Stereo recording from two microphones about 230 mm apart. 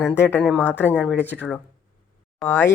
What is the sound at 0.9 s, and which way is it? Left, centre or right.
Speech, centre.